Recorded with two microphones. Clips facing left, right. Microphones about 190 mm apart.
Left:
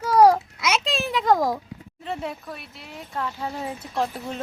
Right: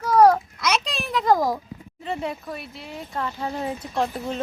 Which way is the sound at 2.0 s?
Centre (ahead or behind).